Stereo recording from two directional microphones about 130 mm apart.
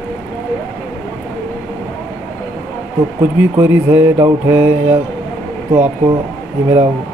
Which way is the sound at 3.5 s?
15° right (ahead or behind).